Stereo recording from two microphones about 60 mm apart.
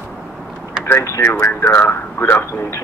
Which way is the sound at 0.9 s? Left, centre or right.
Left.